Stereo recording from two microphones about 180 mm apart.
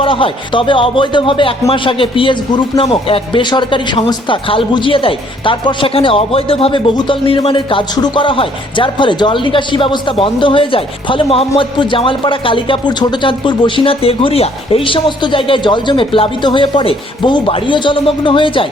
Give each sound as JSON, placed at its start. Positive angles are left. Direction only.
{"t": 0.0, "sound": "speech", "side_deg": 30}